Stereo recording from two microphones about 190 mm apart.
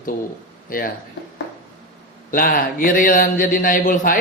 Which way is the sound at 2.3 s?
50° left (ahead or behind).